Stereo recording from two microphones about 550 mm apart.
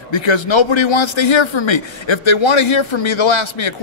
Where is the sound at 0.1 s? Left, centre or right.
Left.